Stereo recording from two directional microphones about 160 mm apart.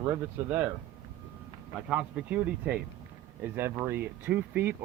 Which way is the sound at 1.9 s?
5° right (ahead or behind).